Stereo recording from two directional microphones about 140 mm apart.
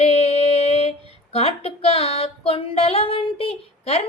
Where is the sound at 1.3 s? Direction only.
45° left (ahead or behind).